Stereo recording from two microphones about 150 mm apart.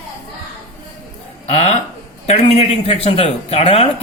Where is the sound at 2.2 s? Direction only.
40° left (ahead or behind).